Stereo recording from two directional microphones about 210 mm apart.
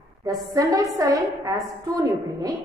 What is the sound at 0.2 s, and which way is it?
A woman's voice, 15° right (ahead or behind).